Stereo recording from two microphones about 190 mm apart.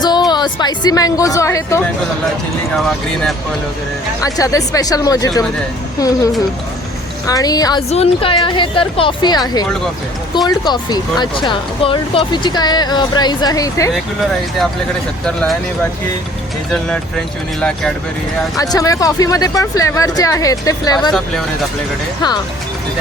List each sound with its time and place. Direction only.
0.0 s a woman's voice: 20° left (ahead or behind)
2.7 s speech: centre (ahead or behind)
4.2 s speech: 15° left (ahead or behind)
7.3 s speech: 20° left (ahead or behind)
7.9 s speech: 30° left (ahead or behind); by 13.9 s 15° left (ahead or behind)
17.6 s speech: 5° left (ahead or behind)
18.5 s speech: 20° left (ahead or behind)
21.1 s speech: centre (ahead or behind)